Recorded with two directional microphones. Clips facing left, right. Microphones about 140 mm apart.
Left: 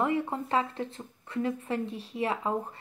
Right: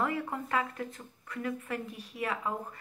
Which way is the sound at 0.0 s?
25° left (ahead or behind).